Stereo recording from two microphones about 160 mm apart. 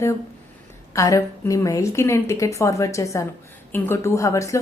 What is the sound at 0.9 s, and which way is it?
A woman's voice, 20° left (ahead or behind).